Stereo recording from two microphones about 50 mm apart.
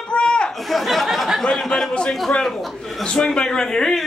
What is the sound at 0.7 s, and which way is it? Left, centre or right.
Speech, centre.